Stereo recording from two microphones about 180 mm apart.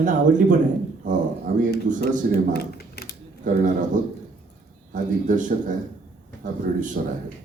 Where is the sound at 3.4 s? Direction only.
45° right (ahead or behind).